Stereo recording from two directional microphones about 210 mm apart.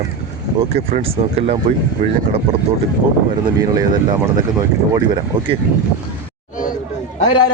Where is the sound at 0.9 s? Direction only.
30° right (ahead or behind).